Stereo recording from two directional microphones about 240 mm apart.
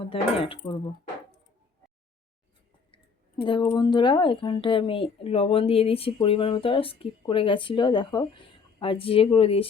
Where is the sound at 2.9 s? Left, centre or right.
Left.